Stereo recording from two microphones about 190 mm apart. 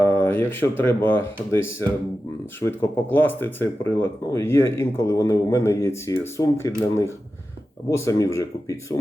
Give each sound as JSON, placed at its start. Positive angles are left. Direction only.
{"t": 0.0, "sound": "a sound", "side_deg": 10}
{"t": 0.8, "sound": "speech", "side_deg": 10}
{"t": 2.6, "sound": "speech", "side_deg": 10}